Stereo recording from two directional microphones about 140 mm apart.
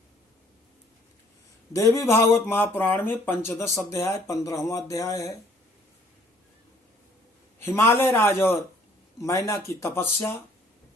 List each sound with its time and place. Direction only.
1.7 s speech: 20° left (ahead or behind)
7.6 s speech: 20° left (ahead or behind)